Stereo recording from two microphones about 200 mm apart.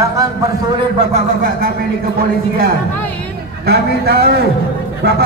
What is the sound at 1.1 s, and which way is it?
Music, 45° right (ahead or behind).